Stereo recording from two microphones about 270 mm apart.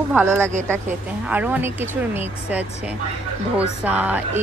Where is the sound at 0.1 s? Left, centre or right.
Centre.